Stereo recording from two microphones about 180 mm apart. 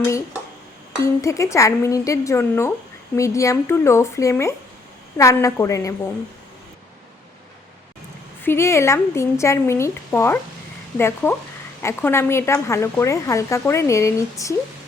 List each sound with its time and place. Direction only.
1.0 s speech: 15° left (ahead or behind)
8.4 s speech: 15° left (ahead or behind)